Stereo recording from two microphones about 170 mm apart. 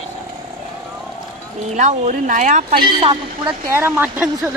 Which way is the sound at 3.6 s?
15° right (ahead or behind).